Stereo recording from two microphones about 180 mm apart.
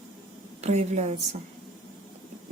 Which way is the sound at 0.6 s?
40° right (ahead or behind).